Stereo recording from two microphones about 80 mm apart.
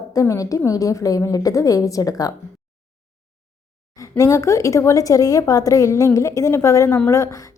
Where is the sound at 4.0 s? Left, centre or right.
Left.